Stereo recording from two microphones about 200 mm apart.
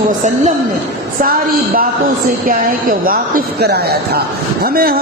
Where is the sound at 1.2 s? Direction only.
45° right (ahead or behind).